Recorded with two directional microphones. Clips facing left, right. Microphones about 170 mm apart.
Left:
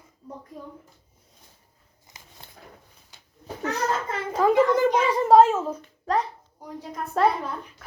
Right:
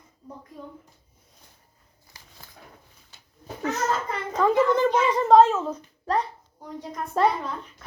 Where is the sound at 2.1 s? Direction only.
20° left (ahead or behind).